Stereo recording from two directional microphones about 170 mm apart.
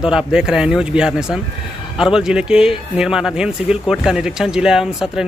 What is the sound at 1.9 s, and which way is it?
Speech, 5° right (ahead or behind).